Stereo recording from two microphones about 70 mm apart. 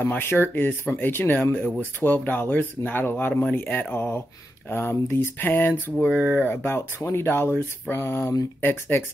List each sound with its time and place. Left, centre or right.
0.0 s speech: left
0.7 s speech: left
8.5 s speech: left